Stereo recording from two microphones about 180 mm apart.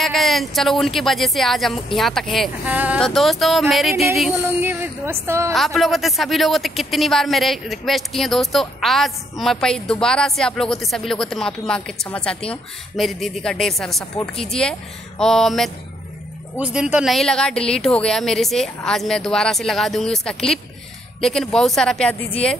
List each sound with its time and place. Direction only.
0.0 s a woman's voice: centre (ahead or behind); by 5.5 s 15° right (ahead or behind)
5.5 s speech: centre (ahead or behind)